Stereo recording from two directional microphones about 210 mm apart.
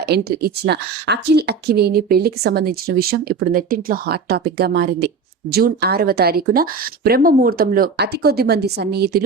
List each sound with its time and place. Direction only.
0.0 s speech: 50° right (ahead or behind)